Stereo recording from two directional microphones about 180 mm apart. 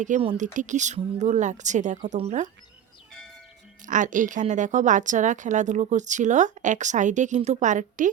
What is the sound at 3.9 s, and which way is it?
A woman's voice, 45° right (ahead or behind).